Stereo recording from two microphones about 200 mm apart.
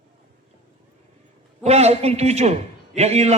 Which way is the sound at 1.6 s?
30° right (ahead or behind).